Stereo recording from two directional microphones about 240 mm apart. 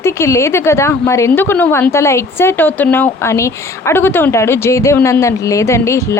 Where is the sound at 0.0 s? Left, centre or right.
Centre.